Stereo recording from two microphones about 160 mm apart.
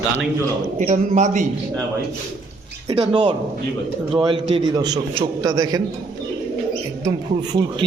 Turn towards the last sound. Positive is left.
turn(degrees=-25)  # may be behind; listen again after turning